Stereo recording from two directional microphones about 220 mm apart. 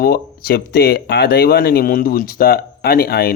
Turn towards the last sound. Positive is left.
turn(degrees=45)  # may be behind; listen again after turning